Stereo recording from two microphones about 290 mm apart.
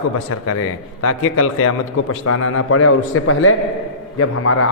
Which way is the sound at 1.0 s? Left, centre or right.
Left.